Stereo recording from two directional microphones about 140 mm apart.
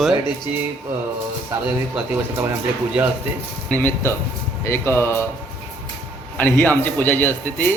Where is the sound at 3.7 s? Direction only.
15° left (ahead or behind).